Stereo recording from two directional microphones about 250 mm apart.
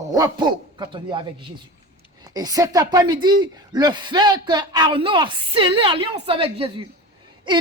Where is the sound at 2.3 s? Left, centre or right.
Centre.